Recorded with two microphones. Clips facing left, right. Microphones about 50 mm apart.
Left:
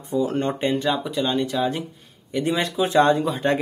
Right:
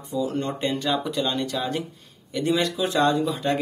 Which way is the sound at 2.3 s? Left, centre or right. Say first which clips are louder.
Even; left.